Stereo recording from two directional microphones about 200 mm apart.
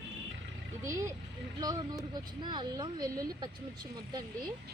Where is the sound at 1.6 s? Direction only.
20° right (ahead or behind).